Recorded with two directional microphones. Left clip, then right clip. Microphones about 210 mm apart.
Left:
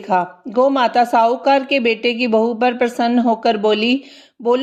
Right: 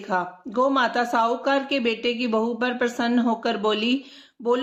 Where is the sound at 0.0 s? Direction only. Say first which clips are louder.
Left 8 dB; 25° left (ahead or behind).